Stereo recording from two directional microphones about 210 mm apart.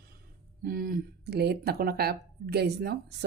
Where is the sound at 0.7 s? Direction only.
40° right (ahead or behind).